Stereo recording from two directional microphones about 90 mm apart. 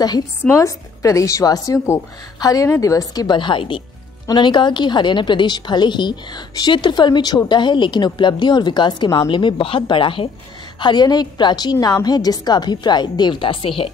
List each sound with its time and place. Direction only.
0.5 s a woman's voice: 35° left (ahead or behind)
3.3 s a woman's voice: 60° left (ahead or behind)
10.8 s a woman's voice: 55° left (ahead or behind); by 13.9 s 90° left